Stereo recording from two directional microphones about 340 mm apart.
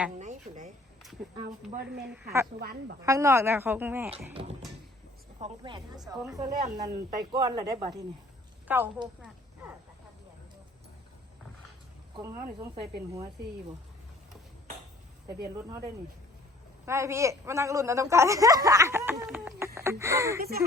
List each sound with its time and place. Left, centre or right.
0.2 s a sound: right
1.4 s speech: right
3.0 s a woman's voice: centre
5.4 s a woman's voice: centre
12.1 s a woman's voice: centre
15.3 s speech: right
16.8 s a woman's voice: centre